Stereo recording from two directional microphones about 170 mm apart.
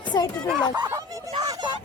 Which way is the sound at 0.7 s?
25° right (ahead or behind).